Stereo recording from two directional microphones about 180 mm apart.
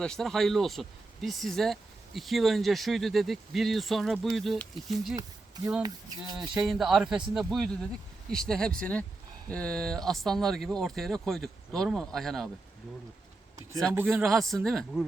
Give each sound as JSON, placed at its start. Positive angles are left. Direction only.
{"t": 0.0, "sound": "speech", "side_deg": 5}
{"t": 5.8, "sound": "speech", "side_deg": -25}
{"t": 6.4, "sound": "speech", "side_deg": 0}
{"t": 14.1, "sound": "speech", "side_deg": 0}